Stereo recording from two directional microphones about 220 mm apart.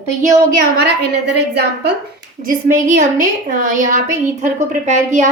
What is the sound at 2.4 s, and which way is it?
A woman's voice, 40° right (ahead or behind).